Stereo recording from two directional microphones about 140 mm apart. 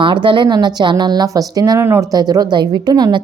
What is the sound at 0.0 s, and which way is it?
A woman's voice, 35° right (ahead or behind).